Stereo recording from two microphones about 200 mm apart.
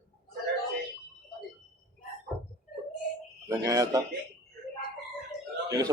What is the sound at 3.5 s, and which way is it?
Speech, 15° right (ahead or behind).